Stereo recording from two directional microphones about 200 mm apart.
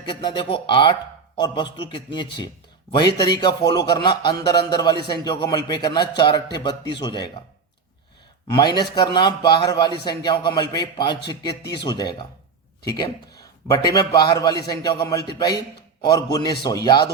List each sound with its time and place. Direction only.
0.0 s a man's voice: 25° left (ahead or behind)
8.4 s a man's voice: 20° left (ahead or behind)